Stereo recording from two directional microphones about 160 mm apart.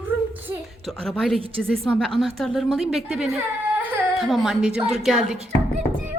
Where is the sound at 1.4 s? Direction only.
35° right (ahead or behind).